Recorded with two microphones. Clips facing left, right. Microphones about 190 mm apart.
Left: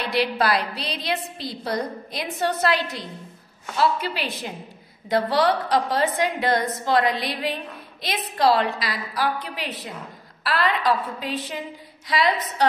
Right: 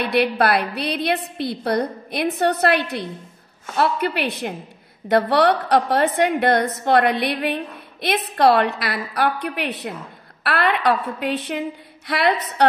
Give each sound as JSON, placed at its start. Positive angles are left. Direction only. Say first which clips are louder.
{"t": 0.0, "sound": "a woman's voice", "louder": "right 4 dB", "side_deg": -60}